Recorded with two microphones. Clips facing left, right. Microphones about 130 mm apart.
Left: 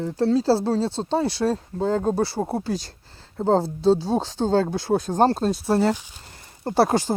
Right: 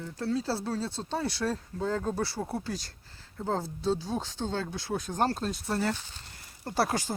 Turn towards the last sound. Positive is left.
turn(degrees=30)  # may be behind; listen again after turning